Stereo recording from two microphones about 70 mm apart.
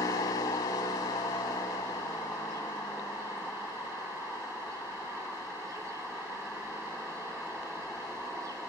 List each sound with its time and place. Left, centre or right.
0.0 s vehicle: left